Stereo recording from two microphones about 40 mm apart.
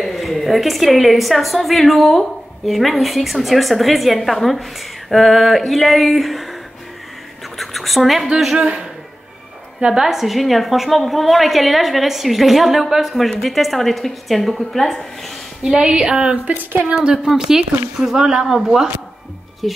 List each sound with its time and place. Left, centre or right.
0.0 s a woman's voice: centre
7.5 s a sound: centre
9.9 s a woman's voice: centre
15.7 s speech: centre
17.3 s a woman's voice: centre